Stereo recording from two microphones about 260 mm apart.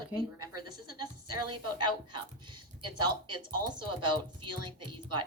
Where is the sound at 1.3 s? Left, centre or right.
Right.